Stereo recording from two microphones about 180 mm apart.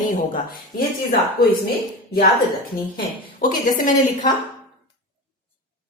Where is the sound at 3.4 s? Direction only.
50° left (ahead or behind).